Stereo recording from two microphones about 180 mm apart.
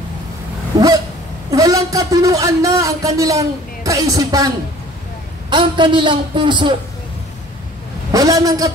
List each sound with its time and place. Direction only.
0.7 s a sound: 20° right (ahead or behind)
1.5 s a man's voice: 20° right (ahead or behind)
5.5 s a man's voice: 25° right (ahead or behind)
8.1 s a man's voice: 20° right (ahead or behind)